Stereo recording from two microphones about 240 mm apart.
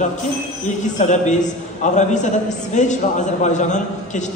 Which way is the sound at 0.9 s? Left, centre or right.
Left.